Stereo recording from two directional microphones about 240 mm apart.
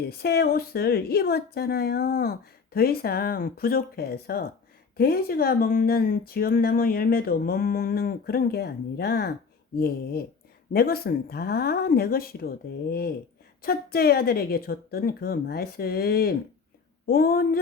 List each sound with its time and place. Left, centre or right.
0.0 s speech: left